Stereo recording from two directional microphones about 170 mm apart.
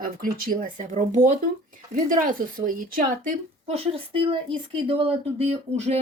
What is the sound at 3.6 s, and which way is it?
Speech, 35° right (ahead or behind).